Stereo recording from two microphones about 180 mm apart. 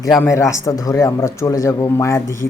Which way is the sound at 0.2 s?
15° left (ahead or behind).